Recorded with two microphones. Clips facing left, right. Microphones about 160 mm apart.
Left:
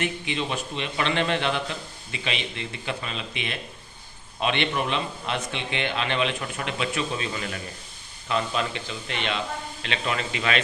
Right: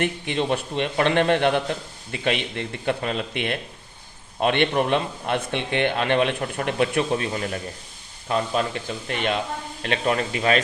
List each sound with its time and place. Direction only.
0.0 s a man's voice: 55° right (ahead or behind)